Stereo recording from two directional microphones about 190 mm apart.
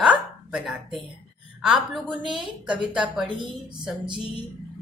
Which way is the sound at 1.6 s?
5° right (ahead or behind).